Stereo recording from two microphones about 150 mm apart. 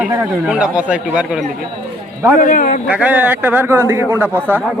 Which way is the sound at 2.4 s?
60° left (ahead or behind).